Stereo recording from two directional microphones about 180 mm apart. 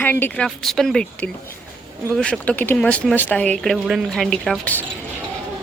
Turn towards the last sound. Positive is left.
turn(degrees=10)  # may be behind; listen again after turning